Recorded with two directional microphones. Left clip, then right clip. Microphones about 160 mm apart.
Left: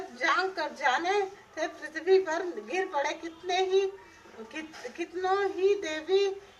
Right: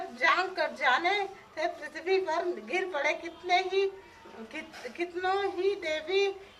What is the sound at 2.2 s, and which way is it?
A woman's voice, 20° left (ahead or behind).